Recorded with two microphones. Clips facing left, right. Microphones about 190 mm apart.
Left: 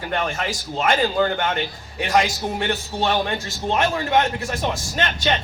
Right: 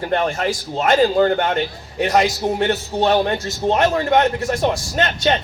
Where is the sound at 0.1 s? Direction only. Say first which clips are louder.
Right 5 dB; 35° right (ahead or behind).